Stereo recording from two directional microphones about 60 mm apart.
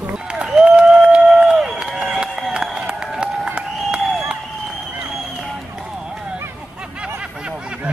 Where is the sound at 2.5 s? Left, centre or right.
Centre.